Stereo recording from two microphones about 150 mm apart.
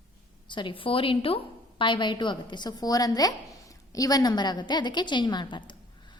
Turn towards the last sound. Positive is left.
turn(degrees=30)  # may be behind; listen again after turning